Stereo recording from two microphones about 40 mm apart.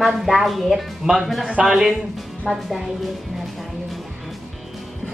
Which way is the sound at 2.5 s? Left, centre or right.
Left.